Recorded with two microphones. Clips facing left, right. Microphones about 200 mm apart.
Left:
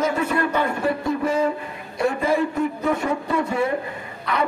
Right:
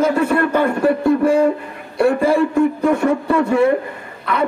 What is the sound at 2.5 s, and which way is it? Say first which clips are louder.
Speech: right 7 dB; 55° right (ahead or behind).